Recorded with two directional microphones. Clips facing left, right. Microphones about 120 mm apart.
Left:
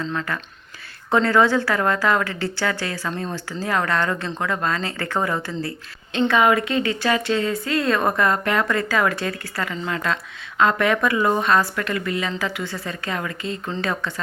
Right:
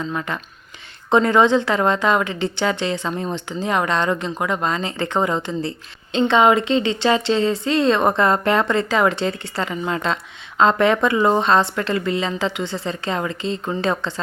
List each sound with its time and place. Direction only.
0.0 s a woman's voice: 15° right (ahead or behind)